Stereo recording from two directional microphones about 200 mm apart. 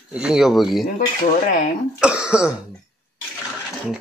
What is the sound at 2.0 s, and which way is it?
Speech, 5° right (ahead or behind).